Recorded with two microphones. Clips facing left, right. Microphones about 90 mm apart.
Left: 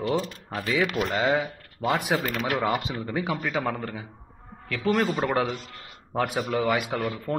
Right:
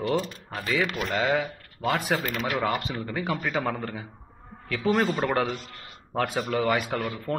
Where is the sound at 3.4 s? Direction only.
Centre (ahead or behind).